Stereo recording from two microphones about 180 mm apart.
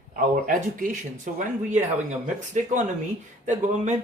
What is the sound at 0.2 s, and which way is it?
Speech, 45° right (ahead or behind).